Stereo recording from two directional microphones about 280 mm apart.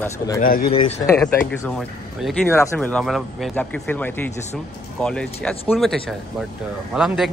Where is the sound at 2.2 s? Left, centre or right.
Centre.